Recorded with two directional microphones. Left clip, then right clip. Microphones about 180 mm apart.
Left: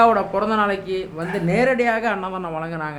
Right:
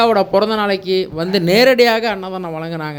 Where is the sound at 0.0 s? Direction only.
30° right (ahead or behind).